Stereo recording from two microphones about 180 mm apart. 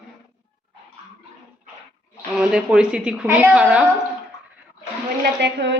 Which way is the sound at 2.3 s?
5° right (ahead or behind).